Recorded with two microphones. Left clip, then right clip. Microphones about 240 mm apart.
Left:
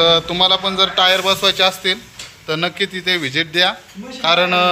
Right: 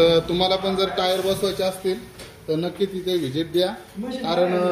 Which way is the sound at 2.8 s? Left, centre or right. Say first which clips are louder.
Left 5 dB; left.